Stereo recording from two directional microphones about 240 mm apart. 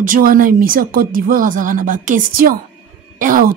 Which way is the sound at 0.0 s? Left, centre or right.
Right.